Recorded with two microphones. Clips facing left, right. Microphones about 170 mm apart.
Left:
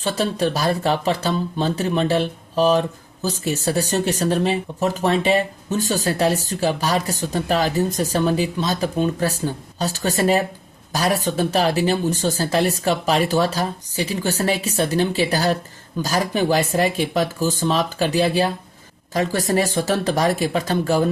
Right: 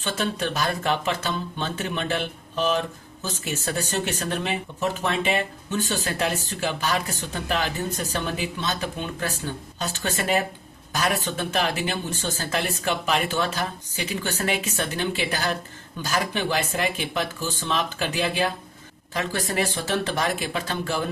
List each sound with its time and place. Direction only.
0.0 s speech: 35° left (ahead or behind)